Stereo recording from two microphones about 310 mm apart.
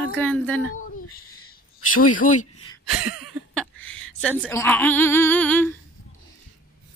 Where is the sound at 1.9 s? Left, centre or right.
Left.